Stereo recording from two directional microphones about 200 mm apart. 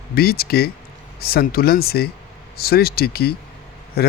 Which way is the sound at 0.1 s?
50° left (ahead or behind).